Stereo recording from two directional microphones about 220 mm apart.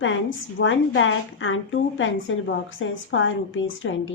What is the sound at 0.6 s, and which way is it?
Speech, 60° left (ahead or behind).